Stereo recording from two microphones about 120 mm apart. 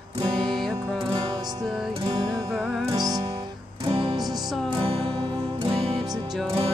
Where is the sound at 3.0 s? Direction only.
35° right (ahead or behind).